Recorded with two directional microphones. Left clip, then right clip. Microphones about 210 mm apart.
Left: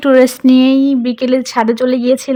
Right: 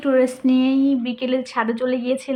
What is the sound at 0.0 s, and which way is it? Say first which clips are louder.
A woman's voice: left 9 dB; 50° left (ahead or behind).